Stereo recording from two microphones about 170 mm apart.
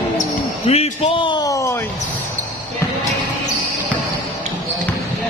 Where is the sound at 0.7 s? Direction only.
40° left (ahead or behind); by 1.8 s 20° left (ahead or behind).